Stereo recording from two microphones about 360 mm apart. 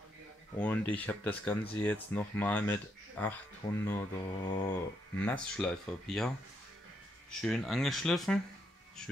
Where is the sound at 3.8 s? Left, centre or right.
Centre.